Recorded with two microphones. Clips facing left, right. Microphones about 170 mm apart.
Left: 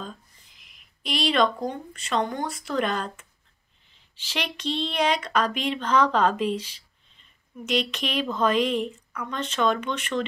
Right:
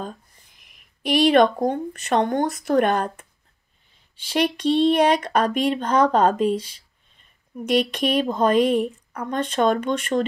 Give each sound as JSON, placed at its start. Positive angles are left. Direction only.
{"t": 1.2, "sound": "speech", "side_deg": -60}
{"t": 4.3, "sound": "speech", "side_deg": -50}